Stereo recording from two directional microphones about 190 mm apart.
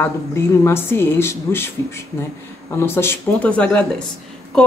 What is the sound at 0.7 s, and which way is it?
Speech, 10° left (ahead or behind).